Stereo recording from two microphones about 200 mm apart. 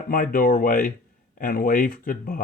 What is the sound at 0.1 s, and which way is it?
Speech, 45° left (ahead or behind).